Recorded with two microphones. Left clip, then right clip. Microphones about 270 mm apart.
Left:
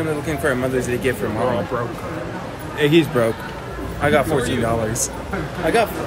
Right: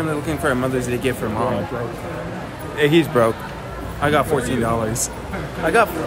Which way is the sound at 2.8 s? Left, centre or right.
Right.